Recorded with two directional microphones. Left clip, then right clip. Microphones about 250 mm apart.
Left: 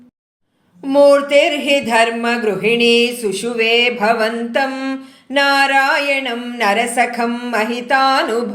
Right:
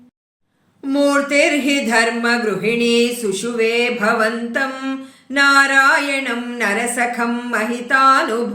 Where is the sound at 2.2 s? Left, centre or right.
Centre.